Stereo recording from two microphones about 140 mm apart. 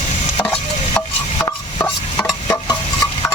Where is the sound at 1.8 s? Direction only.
5° left (ahead or behind).